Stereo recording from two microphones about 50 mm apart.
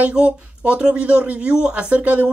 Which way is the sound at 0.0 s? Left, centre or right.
Right.